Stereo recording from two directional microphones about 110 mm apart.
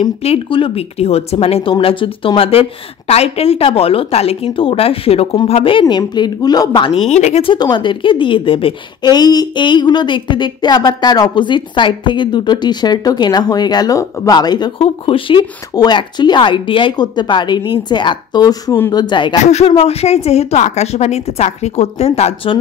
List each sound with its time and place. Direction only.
0.0 s speech: 70° left (ahead or behind)
5.5 s a woman's voice: 50° left (ahead or behind); by 7.4 s 90° left
7.5 s a woman's voice: 40° left (ahead or behind)
9.1 s a woman's voice: 40° left (ahead or behind)
14.8 s a woman's voice: 60° left (ahead or behind)
15.7 s a woman's voice: 40° left (ahead or behind)
19.4 s a woman's voice: 75° left (ahead or behind)